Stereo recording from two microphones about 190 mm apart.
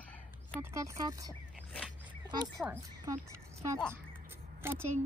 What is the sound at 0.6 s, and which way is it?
Speech, 15° right (ahead or behind).